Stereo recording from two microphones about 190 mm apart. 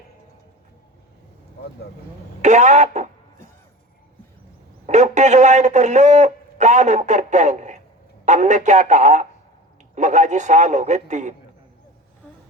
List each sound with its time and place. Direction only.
2.4 s a man's voice: 40° right (ahead or behind)
4.9 s a sound: 40° right (ahead or behind)
8.2 s a man's voice: 40° right (ahead or behind)